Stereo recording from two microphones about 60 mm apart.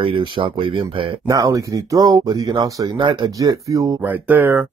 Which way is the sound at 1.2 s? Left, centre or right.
Right.